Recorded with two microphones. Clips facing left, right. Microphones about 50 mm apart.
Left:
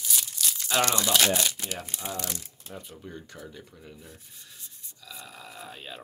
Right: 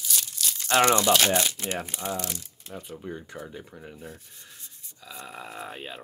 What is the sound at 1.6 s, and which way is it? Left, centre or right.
Speech, centre.